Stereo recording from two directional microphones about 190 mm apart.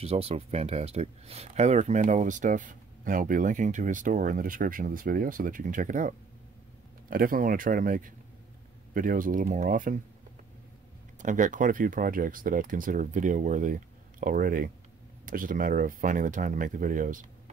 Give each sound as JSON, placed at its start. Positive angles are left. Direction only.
{"t": 0.0, "sound": "speech", "side_deg": -30}
{"t": 11.1, "sound": "speech", "side_deg": -40}